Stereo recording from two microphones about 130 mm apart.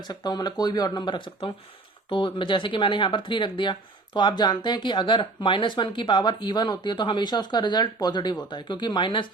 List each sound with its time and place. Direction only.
0.0 s speech: 30° left (ahead or behind)